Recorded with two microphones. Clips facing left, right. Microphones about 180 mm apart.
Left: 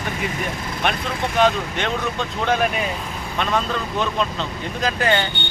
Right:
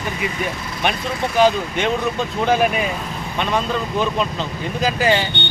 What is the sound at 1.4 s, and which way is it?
Speech, centre (ahead or behind).